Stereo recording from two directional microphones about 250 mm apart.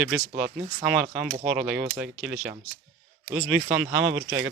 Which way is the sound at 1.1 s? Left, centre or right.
Centre.